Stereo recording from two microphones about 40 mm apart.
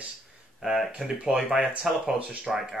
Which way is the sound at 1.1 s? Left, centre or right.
Right.